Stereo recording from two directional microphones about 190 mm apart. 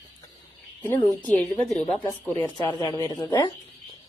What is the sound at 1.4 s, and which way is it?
Speech, 40° left (ahead or behind).